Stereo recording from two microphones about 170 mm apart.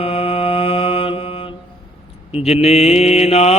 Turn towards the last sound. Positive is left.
turn(degrees=35)  # may be behind; listen again after turning